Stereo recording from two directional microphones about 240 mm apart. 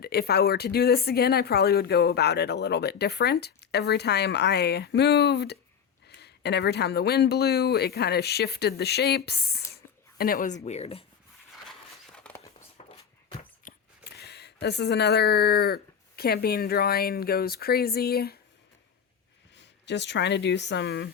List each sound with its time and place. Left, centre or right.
0.0 s speech: left
12.1 s a sound: centre
13.7 s speech: left
19.5 s speech: left